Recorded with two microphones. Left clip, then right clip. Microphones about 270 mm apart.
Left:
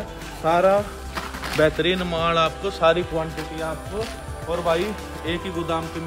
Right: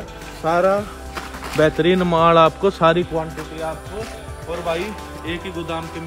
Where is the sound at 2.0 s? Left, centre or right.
Centre.